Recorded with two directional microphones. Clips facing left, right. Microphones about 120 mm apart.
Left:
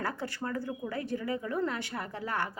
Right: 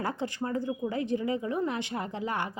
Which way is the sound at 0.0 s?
20° right (ahead or behind).